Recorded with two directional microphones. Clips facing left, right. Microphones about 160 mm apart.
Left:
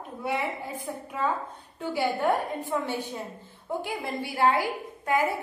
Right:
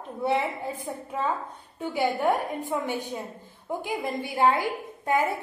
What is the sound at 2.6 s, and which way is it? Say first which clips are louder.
A woman's voice: right 1 dB; 15° right (ahead or behind).